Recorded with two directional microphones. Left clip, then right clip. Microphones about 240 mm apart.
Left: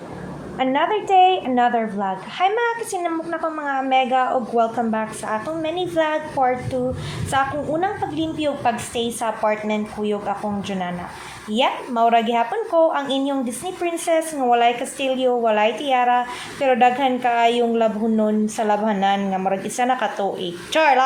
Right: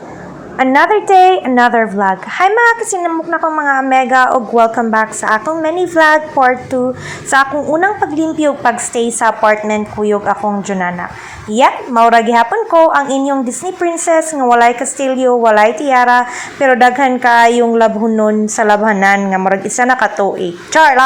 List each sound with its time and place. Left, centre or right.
0.6 s a woman's voice: right
14.9 s a woman's voice: right
15.2 s a woman's voice: right